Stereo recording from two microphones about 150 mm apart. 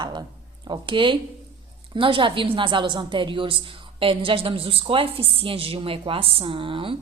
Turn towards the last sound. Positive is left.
turn(degrees=-35)  # may be behind; listen again after turning